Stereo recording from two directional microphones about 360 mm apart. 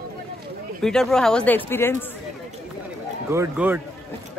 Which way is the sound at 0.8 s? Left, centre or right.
Centre.